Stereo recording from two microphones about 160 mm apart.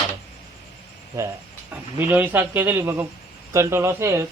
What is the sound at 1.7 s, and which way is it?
Speech, 10° right (ahead or behind).